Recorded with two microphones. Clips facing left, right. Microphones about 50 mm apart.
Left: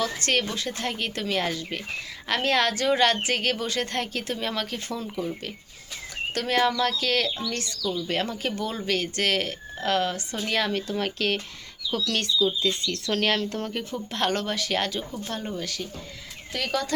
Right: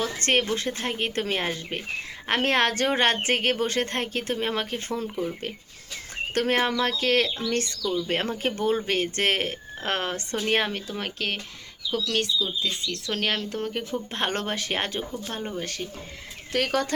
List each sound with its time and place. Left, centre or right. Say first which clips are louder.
0.0 s speech: right 1 dB; right
6.3 s speech: even; right
10.7 s speech: left 4 dB; centre
14.1 s speech: left 3 dB; right